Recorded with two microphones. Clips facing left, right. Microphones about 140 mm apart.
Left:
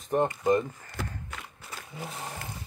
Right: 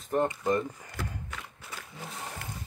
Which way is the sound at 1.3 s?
5° left (ahead or behind).